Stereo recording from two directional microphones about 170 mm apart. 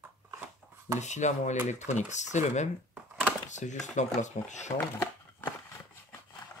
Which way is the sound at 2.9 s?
10° right (ahead or behind).